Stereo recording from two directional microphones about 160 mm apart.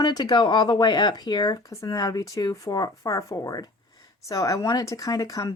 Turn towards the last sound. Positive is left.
turn(degrees=20)  # may be behind; listen again after turning